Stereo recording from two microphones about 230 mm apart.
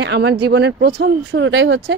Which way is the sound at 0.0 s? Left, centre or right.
Right.